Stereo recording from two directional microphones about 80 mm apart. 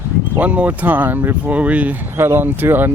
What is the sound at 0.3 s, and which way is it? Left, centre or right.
Speech, centre.